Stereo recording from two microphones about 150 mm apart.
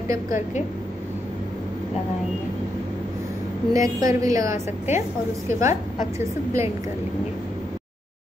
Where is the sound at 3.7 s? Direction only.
25° right (ahead or behind).